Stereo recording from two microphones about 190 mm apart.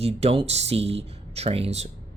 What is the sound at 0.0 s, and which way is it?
Speech, 30° right (ahead or behind).